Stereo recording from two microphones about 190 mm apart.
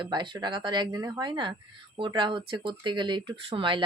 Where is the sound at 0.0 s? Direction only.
25° right (ahead or behind).